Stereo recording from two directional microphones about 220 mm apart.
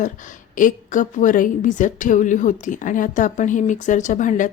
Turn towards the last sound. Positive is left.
turn(degrees=35)  # may be behind; listen again after turning